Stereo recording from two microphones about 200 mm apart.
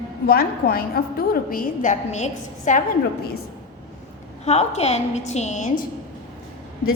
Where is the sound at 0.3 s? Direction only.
45° left (ahead or behind).